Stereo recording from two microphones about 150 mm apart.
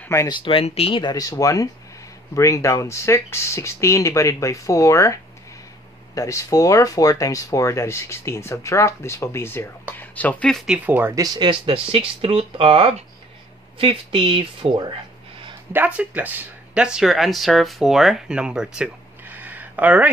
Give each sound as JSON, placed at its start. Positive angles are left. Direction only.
{"t": 0.0, "sound": "speech", "side_deg": 20}
{"t": 0.3, "sound": "speech", "side_deg": 35}
{"t": 10.7, "sound": "speech", "side_deg": -10}
{"t": 15.7, "sound": "speech", "side_deg": -10}